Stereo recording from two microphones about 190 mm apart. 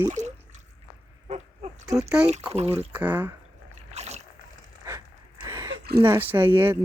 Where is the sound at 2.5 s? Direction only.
35° right (ahead or behind).